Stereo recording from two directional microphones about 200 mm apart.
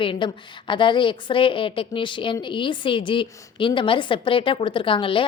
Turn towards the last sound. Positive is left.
turn(degrees=25)  # may be behind; listen again after turning